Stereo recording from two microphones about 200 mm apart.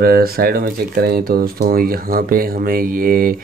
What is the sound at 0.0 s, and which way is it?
Speech, 50° right (ahead or behind).